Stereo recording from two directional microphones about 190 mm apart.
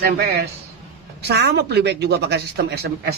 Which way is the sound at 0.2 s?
55° right (ahead or behind).